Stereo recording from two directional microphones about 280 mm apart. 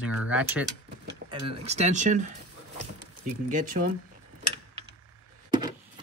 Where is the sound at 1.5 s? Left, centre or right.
Right.